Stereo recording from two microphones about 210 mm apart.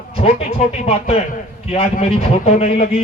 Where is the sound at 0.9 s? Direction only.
30° left (ahead or behind).